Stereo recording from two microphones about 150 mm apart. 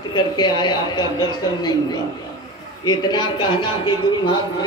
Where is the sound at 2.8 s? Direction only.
30° left (ahead or behind).